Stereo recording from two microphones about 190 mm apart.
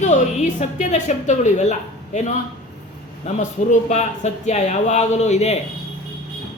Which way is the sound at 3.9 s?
35° left (ahead or behind).